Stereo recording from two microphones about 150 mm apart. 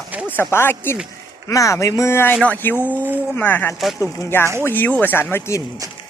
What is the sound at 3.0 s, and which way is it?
Speech, 10° right (ahead or behind).